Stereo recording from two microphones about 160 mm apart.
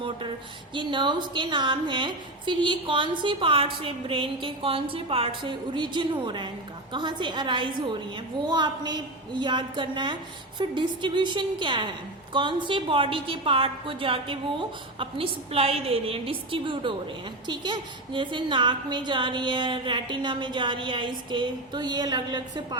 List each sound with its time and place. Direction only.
0.7 s a woman's voice: 30° right (ahead or behind)